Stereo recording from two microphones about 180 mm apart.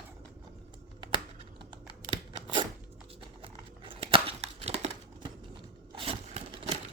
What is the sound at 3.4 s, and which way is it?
Crumpling, 30° right (ahead or behind).